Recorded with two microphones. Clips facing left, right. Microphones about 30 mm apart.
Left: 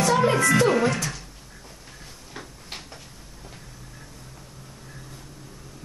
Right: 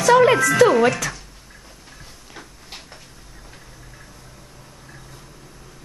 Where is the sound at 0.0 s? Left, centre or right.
Right.